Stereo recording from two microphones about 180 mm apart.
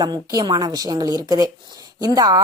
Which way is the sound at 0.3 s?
20° right (ahead or behind).